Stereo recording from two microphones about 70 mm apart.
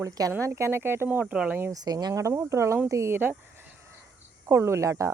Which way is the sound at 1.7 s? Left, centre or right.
Right.